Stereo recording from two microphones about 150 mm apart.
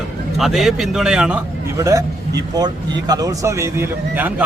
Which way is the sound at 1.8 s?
20° right (ahead or behind).